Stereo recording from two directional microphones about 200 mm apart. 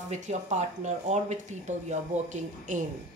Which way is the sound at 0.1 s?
35° right (ahead or behind).